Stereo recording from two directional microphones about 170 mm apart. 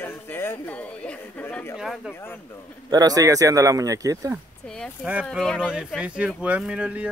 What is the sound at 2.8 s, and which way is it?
Speech, 20° right (ahead or behind).